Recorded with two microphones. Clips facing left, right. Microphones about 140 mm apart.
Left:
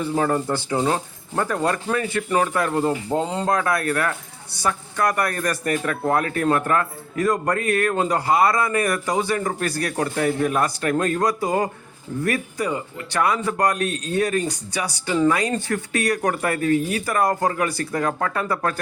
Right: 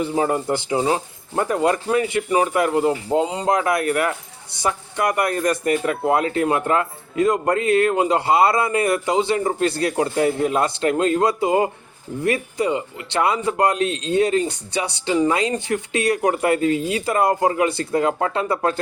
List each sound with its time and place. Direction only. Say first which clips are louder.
0.0 s speech: right 1 dB; 15° right (ahead or behind)